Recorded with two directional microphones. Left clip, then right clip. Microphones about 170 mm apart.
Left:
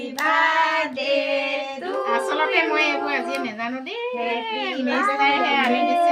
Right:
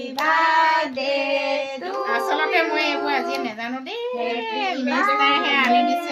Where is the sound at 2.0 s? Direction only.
15° left (ahead or behind).